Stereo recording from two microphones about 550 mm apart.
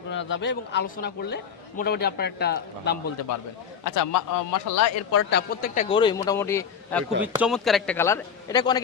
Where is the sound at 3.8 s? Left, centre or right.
Left; by 8.8 s centre.